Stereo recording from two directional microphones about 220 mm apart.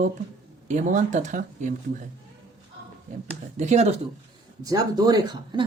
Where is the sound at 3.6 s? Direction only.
30° right (ahead or behind).